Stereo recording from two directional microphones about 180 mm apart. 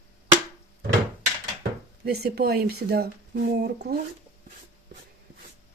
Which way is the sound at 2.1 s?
60° right (ahead or behind).